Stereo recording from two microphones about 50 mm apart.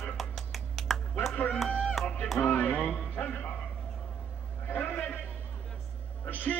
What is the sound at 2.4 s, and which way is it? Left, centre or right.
Speech, left.